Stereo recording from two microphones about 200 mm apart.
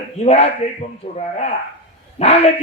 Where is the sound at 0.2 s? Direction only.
35° left (ahead or behind).